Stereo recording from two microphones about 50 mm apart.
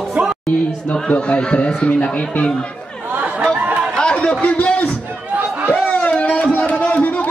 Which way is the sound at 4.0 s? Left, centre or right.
Left.